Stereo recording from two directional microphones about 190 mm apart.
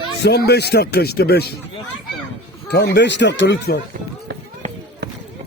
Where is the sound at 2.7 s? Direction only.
65° left (ahead or behind).